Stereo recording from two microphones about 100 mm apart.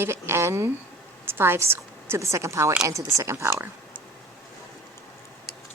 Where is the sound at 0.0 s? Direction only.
25° right (ahead or behind).